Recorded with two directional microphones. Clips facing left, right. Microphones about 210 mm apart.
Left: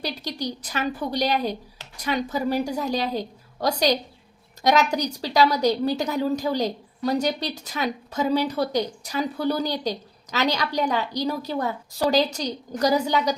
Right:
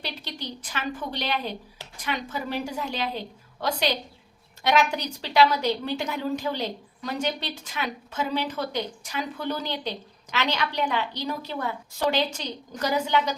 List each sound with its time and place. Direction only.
0.0 s a woman's voice: 40° left (ahead or behind)